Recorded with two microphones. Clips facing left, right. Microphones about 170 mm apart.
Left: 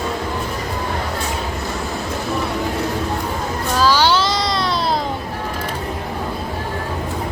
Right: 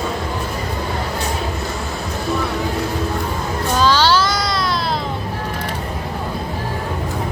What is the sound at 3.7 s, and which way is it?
Child singing, 10° left (ahead or behind).